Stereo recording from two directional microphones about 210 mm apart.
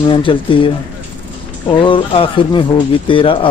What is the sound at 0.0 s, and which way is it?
Speech, 25° left (ahead or behind).